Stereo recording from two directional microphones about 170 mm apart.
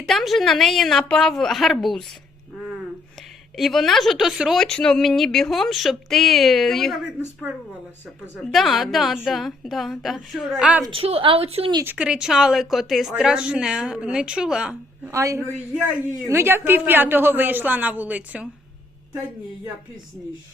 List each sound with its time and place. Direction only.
0.1 s a woman's voice: centre (ahead or behind)
3.6 s a woman's voice: centre (ahead or behind)
8.4 s a woman's voice: centre (ahead or behind)
10.8 s a woman's voice: 35° right (ahead or behind)
11.8 s a woman's voice: 10° right (ahead or behind)
15.1 s a woman's voice: 20° right (ahead or behind)